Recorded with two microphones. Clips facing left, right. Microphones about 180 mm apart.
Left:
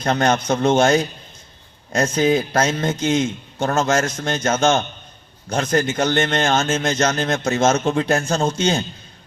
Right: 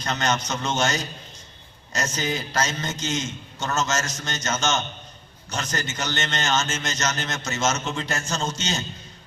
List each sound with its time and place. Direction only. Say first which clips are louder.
0.0 s a man's voice: left 7 dB; 55° left (ahead or behind)
2.1 s a man's voice: left 10 dB; 55° left (ahead or behind)